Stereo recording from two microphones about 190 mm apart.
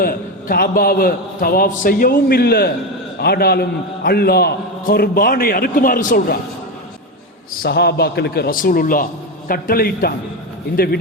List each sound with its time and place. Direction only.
0.0 s a man's voice: 50° left (ahead or behind)
7.6 s a man's voice: 60° left (ahead or behind)